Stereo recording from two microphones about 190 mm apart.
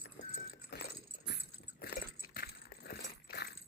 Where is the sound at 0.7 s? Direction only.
55° left (ahead or behind).